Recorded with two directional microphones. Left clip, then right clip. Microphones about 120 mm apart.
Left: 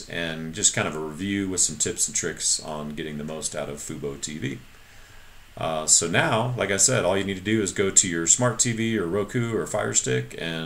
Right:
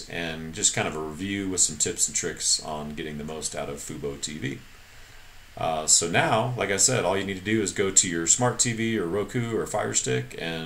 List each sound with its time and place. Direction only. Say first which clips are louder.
0.1 s speech: left 3 dB; 20° left (ahead or behind)
5.6 s speech: left 1 dB; 20° left (ahead or behind)